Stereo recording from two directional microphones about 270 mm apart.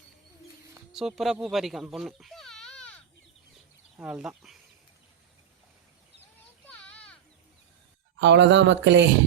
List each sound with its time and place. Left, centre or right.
0.9 s speech: centre
6.7 s children playing: centre
8.2 s speech: right